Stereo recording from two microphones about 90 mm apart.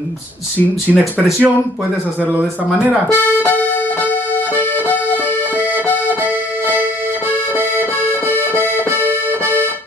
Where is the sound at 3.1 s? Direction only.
20° left (ahead or behind).